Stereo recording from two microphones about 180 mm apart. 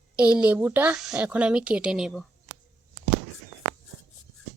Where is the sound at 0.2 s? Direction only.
5° right (ahead or behind).